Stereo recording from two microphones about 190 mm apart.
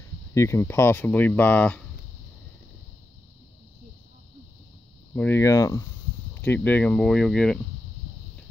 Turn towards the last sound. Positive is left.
turn(degrees=5)  # may be behind; listen again after turning